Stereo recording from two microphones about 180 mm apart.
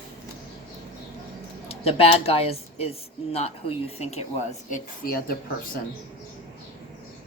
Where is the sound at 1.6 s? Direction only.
35° left (ahead or behind).